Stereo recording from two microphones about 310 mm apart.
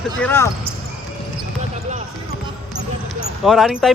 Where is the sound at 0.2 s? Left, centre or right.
Centre.